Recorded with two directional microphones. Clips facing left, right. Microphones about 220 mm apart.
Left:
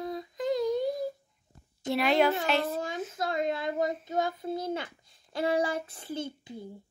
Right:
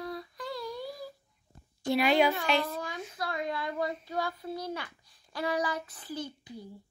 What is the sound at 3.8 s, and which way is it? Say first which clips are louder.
Speech: left 4 dB; 20° left (ahead or behind).